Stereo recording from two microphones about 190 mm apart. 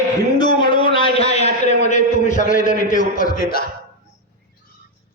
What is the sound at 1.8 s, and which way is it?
A man's voice, 40° left (ahead or behind).